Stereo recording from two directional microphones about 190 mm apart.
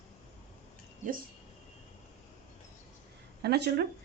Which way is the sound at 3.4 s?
60° right (ahead or behind).